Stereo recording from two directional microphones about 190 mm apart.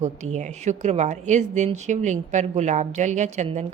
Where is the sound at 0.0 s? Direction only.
35° right (ahead or behind).